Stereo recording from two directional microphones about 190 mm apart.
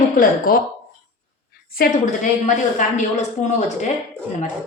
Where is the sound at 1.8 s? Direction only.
40° left (ahead or behind).